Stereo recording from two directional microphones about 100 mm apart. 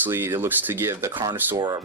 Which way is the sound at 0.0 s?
25° right (ahead or behind).